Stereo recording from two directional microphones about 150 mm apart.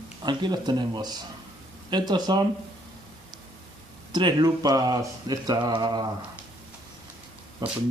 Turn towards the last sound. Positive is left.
turn(degrees=-25)  # may be behind; listen again after turning